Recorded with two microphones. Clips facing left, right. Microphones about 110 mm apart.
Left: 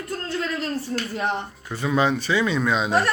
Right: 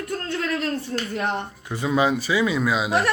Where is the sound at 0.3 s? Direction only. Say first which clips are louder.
Right 1 dB; centre (ahead or behind).